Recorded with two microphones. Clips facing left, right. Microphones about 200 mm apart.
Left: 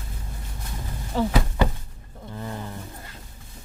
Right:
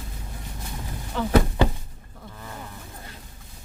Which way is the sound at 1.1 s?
35° left (ahead or behind).